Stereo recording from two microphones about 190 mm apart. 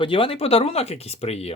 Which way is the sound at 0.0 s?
30° left (ahead or behind).